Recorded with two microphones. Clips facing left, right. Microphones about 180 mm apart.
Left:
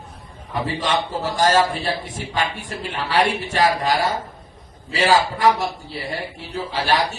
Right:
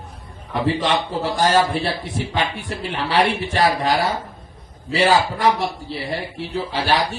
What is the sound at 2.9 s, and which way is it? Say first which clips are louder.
A man's voice: right 1 dB; 45° right (ahead or behind).